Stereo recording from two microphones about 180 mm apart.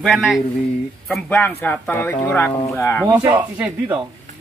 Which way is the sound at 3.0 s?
15° right (ahead or behind).